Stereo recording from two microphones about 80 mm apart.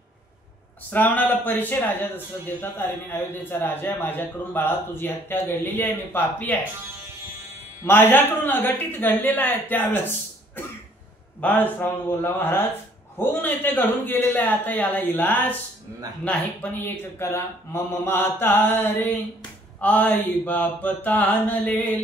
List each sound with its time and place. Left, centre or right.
0.8 s speech: left
7.8 s speech: left